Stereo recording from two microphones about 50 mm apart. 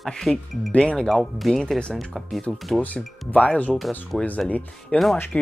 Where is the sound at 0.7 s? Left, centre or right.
Left.